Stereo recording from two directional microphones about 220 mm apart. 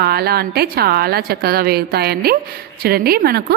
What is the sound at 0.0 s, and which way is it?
A woman's voice, 45° right (ahead or behind).